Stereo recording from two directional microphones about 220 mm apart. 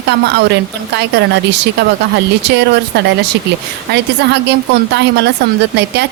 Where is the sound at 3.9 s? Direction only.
50° right (ahead or behind).